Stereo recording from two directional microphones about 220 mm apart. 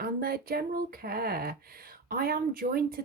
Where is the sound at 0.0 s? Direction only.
45° right (ahead or behind).